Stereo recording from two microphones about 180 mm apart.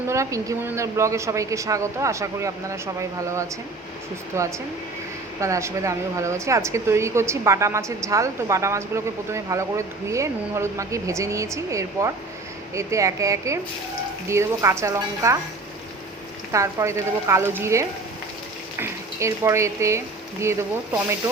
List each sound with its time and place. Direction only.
0.1 s speech: 15° right (ahead or behind)
16.5 s speech: 15° right (ahead or behind)